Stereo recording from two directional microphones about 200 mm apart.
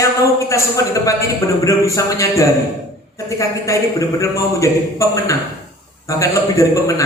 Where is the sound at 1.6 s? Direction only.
15° left (ahead or behind).